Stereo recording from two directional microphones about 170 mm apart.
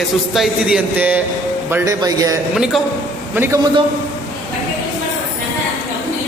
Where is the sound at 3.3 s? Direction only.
10° right (ahead or behind).